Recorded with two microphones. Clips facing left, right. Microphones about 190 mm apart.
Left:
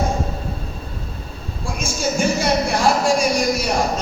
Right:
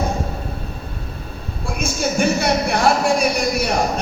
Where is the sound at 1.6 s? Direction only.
60° right (ahead or behind).